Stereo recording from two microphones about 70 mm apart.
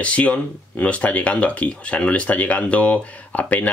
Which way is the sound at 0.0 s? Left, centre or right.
Centre.